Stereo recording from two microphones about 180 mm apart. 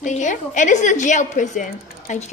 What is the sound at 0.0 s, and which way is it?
A woman's voice, 45° left (ahead or behind).